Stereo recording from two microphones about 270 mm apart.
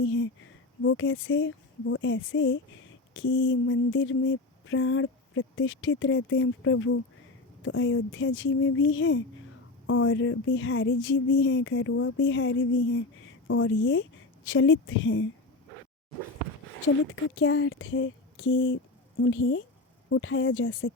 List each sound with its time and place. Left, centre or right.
0.0 s a sound: left
0.8 s speech: left
17.3 s speech: left